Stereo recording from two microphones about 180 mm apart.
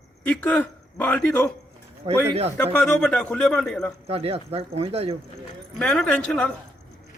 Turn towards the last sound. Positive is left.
turn(degrees=5)  # may be behind; listen again after turning